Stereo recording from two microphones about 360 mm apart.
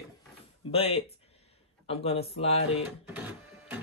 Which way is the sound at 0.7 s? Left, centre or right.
Centre.